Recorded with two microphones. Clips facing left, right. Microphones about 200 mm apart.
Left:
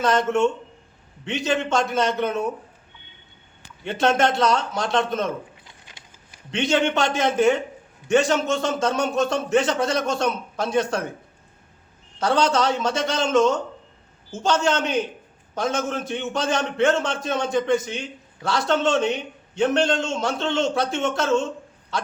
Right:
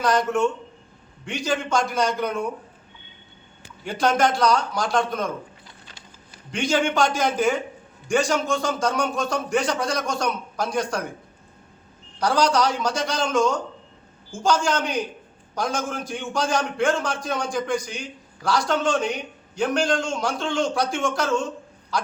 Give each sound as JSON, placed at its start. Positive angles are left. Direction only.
{"t": 0.0, "sound": "a man's voice", "side_deg": 25}
{"t": 3.8, "sound": "a man's voice", "side_deg": 25}
{"t": 6.3, "sound": "a man's voice", "side_deg": 25}
{"t": 12.2, "sound": "a man's voice", "side_deg": 25}